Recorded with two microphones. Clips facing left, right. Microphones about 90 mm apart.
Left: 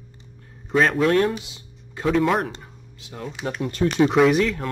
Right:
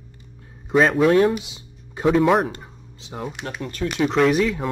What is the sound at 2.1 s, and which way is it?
Speech, 5° right (ahead or behind).